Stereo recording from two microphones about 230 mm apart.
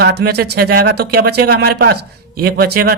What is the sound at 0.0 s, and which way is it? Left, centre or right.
Speech, right.